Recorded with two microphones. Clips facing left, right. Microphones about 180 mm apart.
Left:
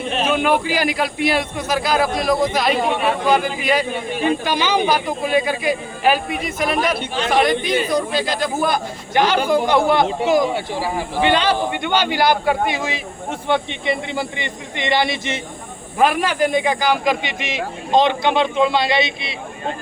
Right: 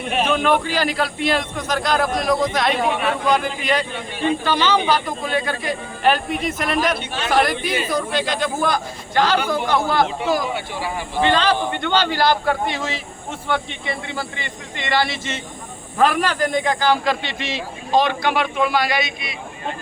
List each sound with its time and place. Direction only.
0.3 s speech: 10° left (ahead or behind)
8.7 s speech: 15° left (ahead or behind)
10.5 s speech: 35° left (ahead or behind)
11.2 s speech: 15° left (ahead or behind)